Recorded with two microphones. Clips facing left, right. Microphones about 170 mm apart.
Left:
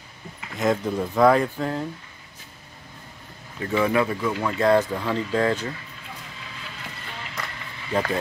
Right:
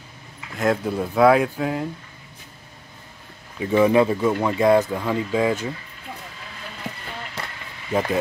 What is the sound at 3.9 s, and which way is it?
Speech, 25° right (ahead or behind).